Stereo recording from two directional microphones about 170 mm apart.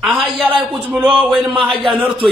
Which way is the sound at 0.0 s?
Centre (ahead or behind).